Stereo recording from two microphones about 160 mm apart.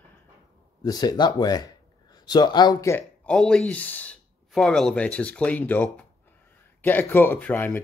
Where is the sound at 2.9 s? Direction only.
5° left (ahead or behind).